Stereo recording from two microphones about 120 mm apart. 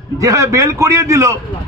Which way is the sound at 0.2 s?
25° right (ahead or behind).